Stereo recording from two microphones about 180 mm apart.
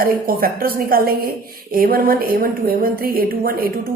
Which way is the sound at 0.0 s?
55° right (ahead or behind).